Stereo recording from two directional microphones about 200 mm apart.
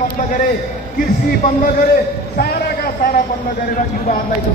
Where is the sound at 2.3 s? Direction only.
50° left (ahead or behind).